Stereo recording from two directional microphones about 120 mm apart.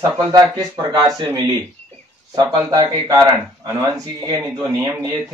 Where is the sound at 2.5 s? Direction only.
35° right (ahead or behind).